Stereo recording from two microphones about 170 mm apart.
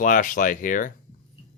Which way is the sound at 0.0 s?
50° left (ahead or behind).